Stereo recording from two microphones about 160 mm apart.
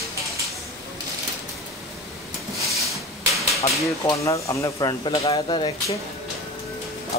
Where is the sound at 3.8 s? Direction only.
20° left (ahead or behind).